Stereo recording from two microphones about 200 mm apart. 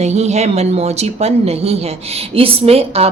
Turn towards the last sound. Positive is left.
turn(degrees=-30)  # may be behind; listen again after turning